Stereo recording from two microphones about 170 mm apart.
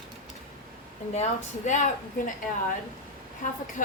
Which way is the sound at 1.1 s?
40° left (ahead or behind).